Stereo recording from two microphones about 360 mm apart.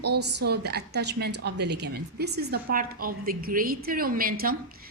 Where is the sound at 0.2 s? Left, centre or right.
Right.